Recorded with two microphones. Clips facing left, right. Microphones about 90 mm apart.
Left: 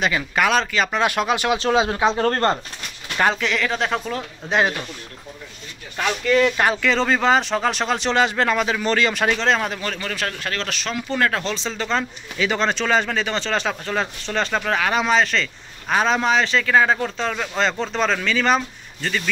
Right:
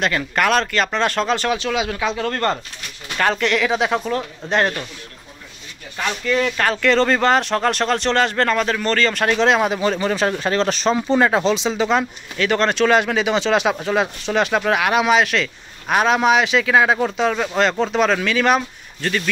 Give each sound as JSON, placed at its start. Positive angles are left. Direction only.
{"t": 0.0, "sound": "speech", "side_deg": 5}
{"t": 1.6, "sound": "speech", "side_deg": 30}
{"t": 3.2, "sound": "speech", "side_deg": 5}
{"t": 6.5, "sound": "speech", "side_deg": 15}
{"t": 6.8, "sound": "speech", "side_deg": 0}
{"t": 9.4, "sound": "speech", "side_deg": -10}
{"t": 12.4, "sound": "speech", "side_deg": 0}